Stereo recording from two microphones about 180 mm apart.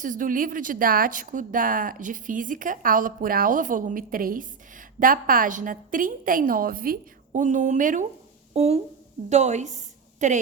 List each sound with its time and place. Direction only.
0.0 s a woman's voice: 45° right (ahead or behind)